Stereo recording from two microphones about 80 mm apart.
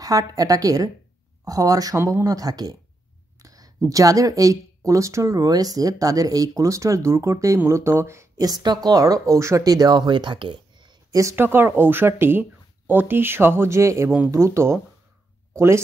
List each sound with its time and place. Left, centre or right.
0.0 s speech: right
8.6 s speech: right
9.6 s speech: right
11.1 s speech: right
11.3 s speech: right